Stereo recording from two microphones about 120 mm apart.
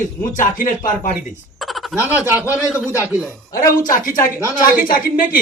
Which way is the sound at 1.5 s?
Centre (ahead or behind).